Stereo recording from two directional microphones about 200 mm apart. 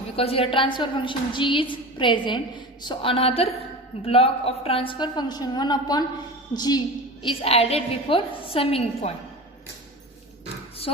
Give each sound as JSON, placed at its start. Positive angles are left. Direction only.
{"t": 0.2, "sound": "a woman's voice", "side_deg": 30}